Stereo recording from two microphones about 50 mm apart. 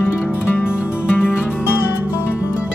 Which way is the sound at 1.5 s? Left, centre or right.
Left.